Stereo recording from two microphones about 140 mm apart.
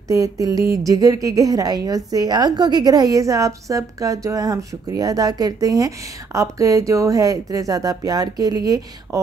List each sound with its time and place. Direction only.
0.1 s a woman's voice: 25° right (ahead or behind)